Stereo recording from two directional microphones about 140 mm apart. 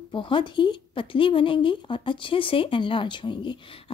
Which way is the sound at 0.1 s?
35° left (ahead or behind).